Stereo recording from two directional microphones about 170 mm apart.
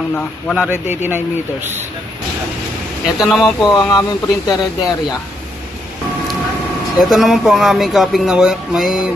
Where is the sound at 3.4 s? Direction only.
25° left (ahead or behind).